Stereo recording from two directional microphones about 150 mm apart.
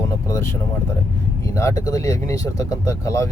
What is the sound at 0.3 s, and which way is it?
Speech, 20° left (ahead or behind).